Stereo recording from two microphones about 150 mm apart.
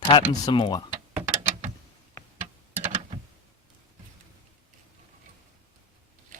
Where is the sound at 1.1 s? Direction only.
50° right (ahead or behind).